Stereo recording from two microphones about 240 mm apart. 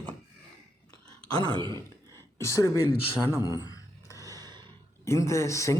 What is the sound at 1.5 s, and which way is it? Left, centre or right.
Speech, centre.